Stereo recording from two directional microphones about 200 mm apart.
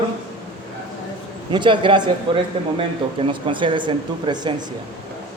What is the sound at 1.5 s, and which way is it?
Speech, 25° right (ahead or behind).